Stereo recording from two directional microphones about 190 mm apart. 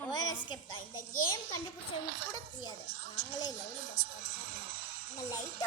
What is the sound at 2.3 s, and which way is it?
Speech, 20° left (ahead or behind).